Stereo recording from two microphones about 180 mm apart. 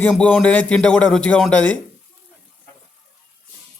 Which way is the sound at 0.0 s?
5° left (ahead or behind).